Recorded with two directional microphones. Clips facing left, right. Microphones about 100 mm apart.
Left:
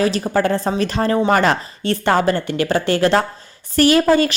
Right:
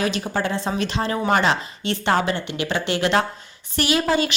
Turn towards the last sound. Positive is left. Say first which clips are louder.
# left 7 dB
turn(degrees=45)  # may be behind; listen again after turning